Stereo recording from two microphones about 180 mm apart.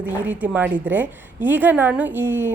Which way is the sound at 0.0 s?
10° right (ahead or behind).